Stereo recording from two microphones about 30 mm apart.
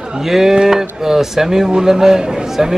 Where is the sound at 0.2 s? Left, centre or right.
Centre.